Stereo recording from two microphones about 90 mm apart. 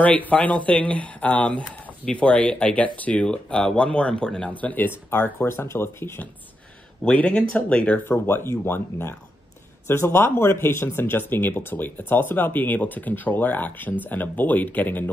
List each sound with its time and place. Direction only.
0.0 s speech: 15° left (ahead or behind)
7.1 s speech: 15° left (ahead or behind)